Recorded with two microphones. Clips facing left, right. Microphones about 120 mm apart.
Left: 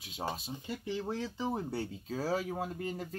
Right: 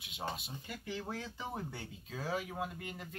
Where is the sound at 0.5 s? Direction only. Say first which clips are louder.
Left 6 dB; 25° left (ahead or behind).